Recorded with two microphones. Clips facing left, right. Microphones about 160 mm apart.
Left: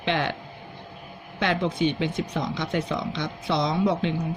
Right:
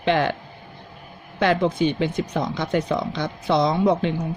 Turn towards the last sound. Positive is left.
turn(degrees=-50)  # may be behind; listen again after turning